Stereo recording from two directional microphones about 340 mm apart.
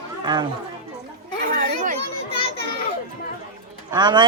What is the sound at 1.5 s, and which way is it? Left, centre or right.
Children playing, right.